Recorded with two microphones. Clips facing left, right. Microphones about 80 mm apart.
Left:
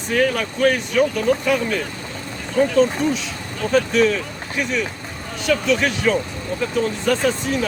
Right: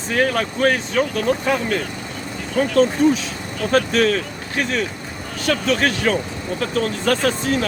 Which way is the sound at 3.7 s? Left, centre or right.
Right.